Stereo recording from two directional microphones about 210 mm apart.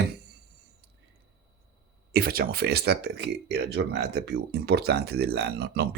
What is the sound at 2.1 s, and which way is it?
Speech, 45° right (ahead or behind).